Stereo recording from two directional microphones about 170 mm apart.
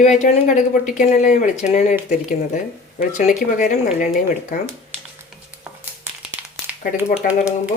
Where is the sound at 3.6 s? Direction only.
45° left (ahead or behind).